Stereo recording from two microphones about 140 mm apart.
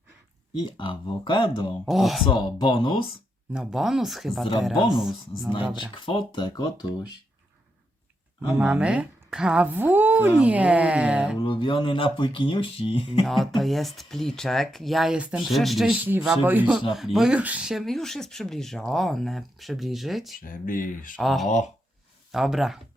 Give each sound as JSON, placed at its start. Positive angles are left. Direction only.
{"t": 0.5, "sound": "speech", "side_deg": 35}
{"t": 1.8, "sound": "speech", "side_deg": 0}
{"t": 2.2, "sound": "speech", "side_deg": 35}
{"t": 3.5, "sound": "speech", "side_deg": -5}
{"t": 5.5, "sound": "speech", "side_deg": 40}
{"t": 8.5, "sound": "a woman's voice", "side_deg": -10}
{"t": 11.3, "sound": "speech", "side_deg": 35}
{"t": 13.2, "sound": "a woman's voice", "side_deg": 0}
{"t": 16.9, "sound": "speech", "side_deg": 0}
{"t": 20.4, "sound": "speech", "side_deg": 75}
{"t": 21.2, "sound": "speech", "side_deg": 0}